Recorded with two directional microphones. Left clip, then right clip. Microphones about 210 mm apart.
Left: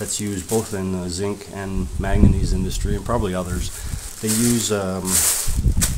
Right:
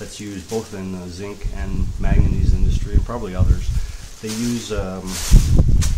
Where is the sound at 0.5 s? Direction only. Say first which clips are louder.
Left 3 dB; 45° left (ahead or behind).